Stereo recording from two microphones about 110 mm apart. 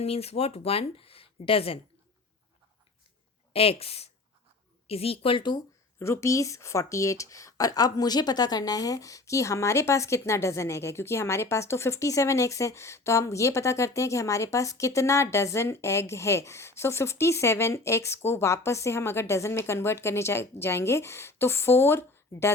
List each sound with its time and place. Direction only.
0.0 s speech: 70° left (ahead or behind)
3.5 s speech: 65° left (ahead or behind); by 5.5 s 45° left (ahead or behind)
6.0 s speech: 25° left (ahead or behind)